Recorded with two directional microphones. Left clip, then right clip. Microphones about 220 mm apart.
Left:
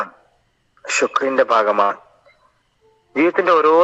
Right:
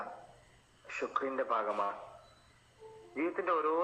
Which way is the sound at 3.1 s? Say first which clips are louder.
Left 18 dB; 50° left (ahead or behind).